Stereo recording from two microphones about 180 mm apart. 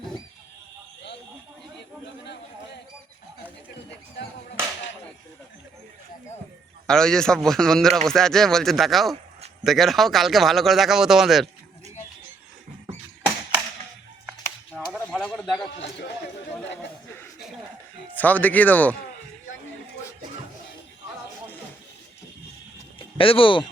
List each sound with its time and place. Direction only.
6.8 s speech: 5° left (ahead or behind)
14.9 s a sound: 5° left (ahead or behind)
18.2 s speech: 10° left (ahead or behind)
23.0 s speech: 30° left (ahead or behind)